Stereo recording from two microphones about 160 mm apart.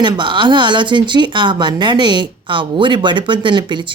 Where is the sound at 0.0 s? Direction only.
30° right (ahead or behind).